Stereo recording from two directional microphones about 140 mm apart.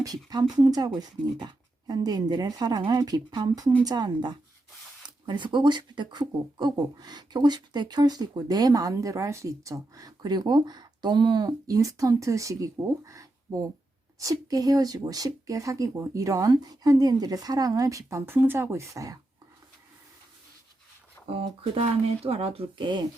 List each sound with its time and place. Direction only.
0.3 s speech: 30° right (ahead or behind)
21.3 s speech: 40° right (ahead or behind)